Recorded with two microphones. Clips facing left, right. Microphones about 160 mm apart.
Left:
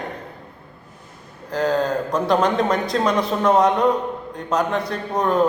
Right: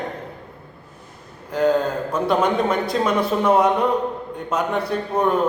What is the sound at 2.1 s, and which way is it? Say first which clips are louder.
A man's voice: right 1 dB; 5° right (ahead or behind).